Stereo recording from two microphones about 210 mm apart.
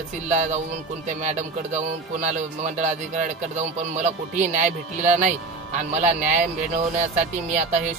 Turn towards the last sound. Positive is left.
turn(degrees=-35)  # may be behind; listen again after turning